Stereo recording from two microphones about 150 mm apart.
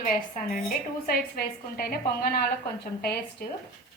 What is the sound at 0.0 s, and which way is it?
A woman's voice, 65° left (ahead or behind).